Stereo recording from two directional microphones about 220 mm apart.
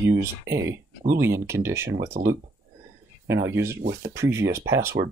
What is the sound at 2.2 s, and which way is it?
Speech, 45° right (ahead or behind).